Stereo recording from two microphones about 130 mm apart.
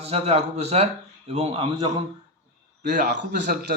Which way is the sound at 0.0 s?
50° right (ahead or behind).